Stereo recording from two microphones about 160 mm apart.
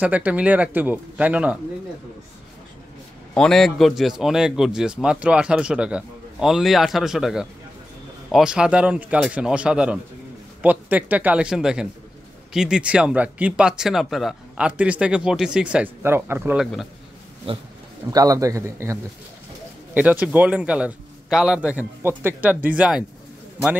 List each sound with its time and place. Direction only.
0.0 s speech: 10° right (ahead or behind)
3.3 s a man's voice: 5° left (ahead or behind); by 16.6 s 15° right (ahead or behind)
17.4 s speech: 35° right (ahead or behind)
18.1 s a man's voice: 20° right (ahead or behind); by 23.0 s 5° right (ahead or behind)